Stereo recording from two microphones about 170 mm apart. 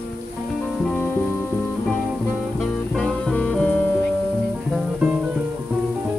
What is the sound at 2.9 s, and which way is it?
Music, 5° left (ahead or behind).